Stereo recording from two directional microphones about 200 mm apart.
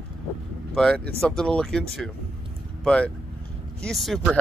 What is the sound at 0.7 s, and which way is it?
Speech, 5° left (ahead or behind).